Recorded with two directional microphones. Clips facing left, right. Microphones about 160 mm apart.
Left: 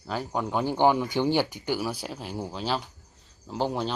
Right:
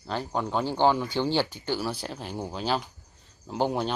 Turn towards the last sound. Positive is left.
turn(degrees=0)  # may be behind; listen again after turning